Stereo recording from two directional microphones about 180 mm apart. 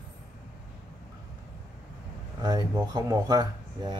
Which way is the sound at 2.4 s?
20° right (ahead or behind).